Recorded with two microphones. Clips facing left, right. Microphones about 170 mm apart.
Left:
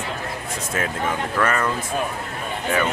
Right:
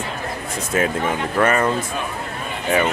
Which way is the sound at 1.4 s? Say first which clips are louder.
Right 5 dB; 25° right (ahead or behind).